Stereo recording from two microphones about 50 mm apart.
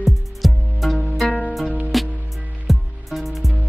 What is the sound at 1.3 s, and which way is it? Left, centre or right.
Music, left.